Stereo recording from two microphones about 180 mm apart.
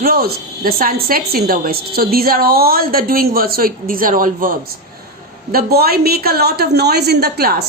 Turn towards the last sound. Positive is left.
turn(degrees=-60)  # may be behind; listen again after turning